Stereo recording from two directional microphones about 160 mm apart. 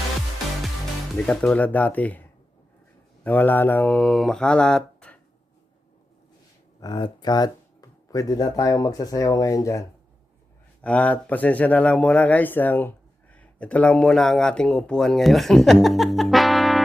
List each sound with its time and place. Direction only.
1.3 s speech: 5° left (ahead or behind)
3.2 s speech: 10° left (ahead or behind)
6.7 s speech: 25° left (ahead or behind)
10.8 s speech: 10° left (ahead or behind)